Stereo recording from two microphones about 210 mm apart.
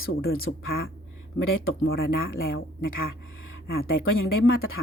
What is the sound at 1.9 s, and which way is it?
Speech, 45° left (ahead or behind).